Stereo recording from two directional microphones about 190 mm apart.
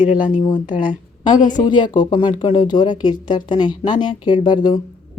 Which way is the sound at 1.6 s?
25° left (ahead or behind).